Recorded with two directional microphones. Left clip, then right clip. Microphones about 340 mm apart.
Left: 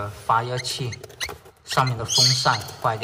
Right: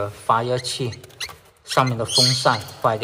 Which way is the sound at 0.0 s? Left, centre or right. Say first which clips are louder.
Right 2 dB; centre.